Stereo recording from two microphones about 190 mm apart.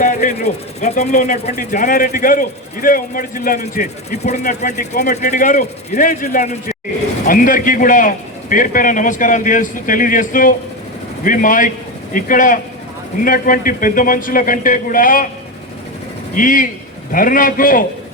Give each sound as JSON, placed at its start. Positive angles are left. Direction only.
{"t": 0.0, "sound": "a man's voice", "side_deg": 45}
{"t": 16.3, "sound": "speech", "side_deg": 45}